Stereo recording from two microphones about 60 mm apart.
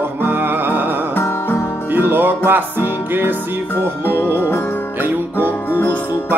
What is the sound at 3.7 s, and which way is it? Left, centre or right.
Music, left.